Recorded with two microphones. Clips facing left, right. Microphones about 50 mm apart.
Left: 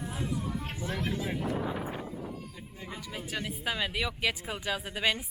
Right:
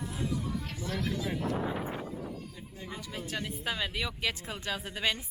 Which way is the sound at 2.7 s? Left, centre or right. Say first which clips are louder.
Even; centre.